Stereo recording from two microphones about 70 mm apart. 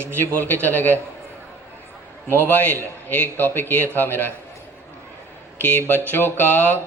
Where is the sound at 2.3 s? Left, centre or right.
Right.